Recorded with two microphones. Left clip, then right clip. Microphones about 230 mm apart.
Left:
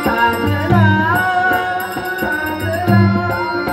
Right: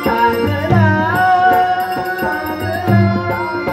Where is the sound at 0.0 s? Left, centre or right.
Left.